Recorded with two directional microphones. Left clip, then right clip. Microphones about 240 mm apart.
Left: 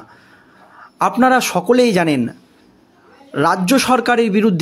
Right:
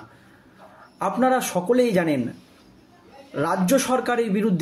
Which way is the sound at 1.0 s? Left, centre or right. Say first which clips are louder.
Left 8 dB; left.